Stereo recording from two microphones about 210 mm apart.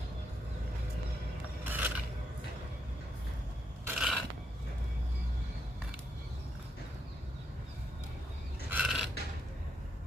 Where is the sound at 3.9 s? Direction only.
5° right (ahead or behind).